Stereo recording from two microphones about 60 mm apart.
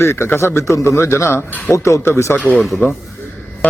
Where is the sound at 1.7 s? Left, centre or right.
Left.